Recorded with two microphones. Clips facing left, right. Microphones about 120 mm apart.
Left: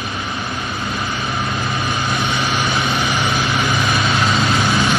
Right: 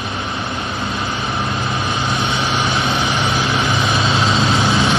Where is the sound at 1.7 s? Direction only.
20° right (ahead or behind).